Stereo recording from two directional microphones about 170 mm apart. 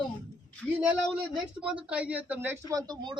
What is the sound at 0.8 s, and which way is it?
Speech, 5° right (ahead or behind).